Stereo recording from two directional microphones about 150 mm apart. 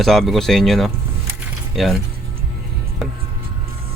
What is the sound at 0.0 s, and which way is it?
Speech, centre (ahead or behind).